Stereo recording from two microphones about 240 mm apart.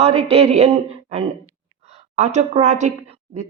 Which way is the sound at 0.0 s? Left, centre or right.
Right.